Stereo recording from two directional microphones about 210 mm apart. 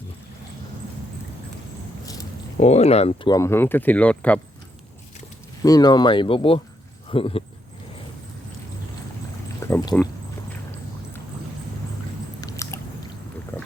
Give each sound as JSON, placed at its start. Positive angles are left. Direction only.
{"t": 2.6, "sound": "speech", "side_deg": 30}
{"t": 5.6, "sound": "speech", "side_deg": 20}
{"t": 9.6, "sound": "a sound", "side_deg": 15}
{"t": 12.4, "sound": "boat", "side_deg": 15}